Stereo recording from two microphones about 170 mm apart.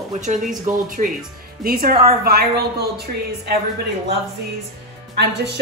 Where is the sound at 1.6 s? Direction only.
60° right (ahead or behind).